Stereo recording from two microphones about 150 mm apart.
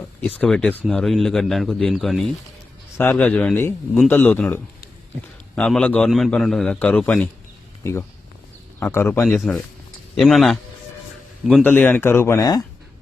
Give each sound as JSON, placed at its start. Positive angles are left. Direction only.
{"t": 0.3, "sound": "a man's voice", "side_deg": 5}
{"t": 3.0, "sound": "a man's voice", "side_deg": 15}
{"t": 7.8, "sound": "speech", "side_deg": 20}
{"t": 9.5, "sound": "a man's voice", "side_deg": 5}